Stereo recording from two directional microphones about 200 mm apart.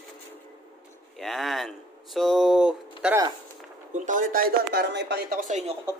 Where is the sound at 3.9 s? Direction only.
40° right (ahead or behind).